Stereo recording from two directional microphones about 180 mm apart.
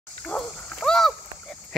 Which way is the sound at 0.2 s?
5° left (ahead or behind).